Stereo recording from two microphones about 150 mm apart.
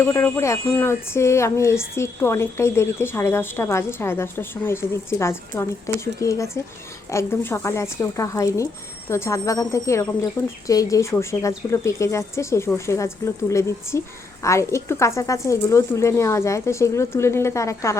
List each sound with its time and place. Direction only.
0.0 s speech: 15° left (ahead or behind)